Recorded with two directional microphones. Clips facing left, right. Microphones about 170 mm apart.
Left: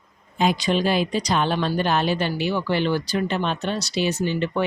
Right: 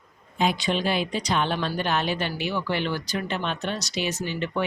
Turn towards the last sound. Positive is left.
turn(degrees=30)  # may be behind; listen again after turning